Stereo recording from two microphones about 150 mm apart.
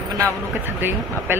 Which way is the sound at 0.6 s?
15° right (ahead or behind).